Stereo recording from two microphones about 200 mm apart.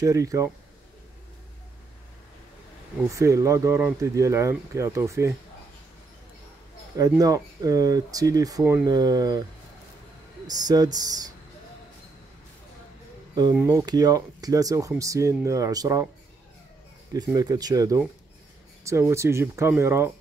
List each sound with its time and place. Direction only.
0.0 s speech: 15° right (ahead or behind)
3.1 s speech: 15° right (ahead or behind)
7.0 s speech: 15° right (ahead or behind)
10.4 s speech: 20° right (ahead or behind)
13.6 s speech: 15° right (ahead or behind)
17.1 s speech: 20° right (ahead or behind)